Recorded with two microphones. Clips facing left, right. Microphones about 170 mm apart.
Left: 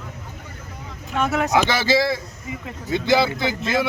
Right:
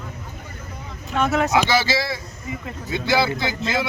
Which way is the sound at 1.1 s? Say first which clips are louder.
Right 1 dB; 10° left (ahead or behind).